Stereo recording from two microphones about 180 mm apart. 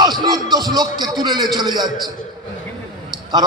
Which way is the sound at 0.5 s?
20° right (ahead or behind).